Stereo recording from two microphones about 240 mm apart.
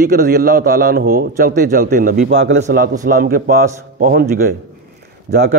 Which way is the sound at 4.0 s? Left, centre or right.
Right.